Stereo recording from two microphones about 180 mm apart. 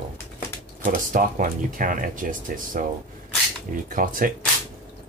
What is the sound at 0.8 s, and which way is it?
Speech, 45° right (ahead or behind).